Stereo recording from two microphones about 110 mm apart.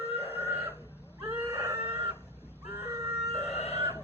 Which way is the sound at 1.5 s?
25° right (ahead or behind).